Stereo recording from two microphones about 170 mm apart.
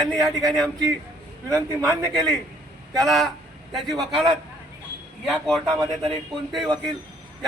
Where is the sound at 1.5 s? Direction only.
5° left (ahead or behind).